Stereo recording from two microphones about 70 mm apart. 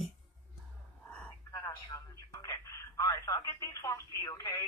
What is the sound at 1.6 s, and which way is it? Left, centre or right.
Telephone, left.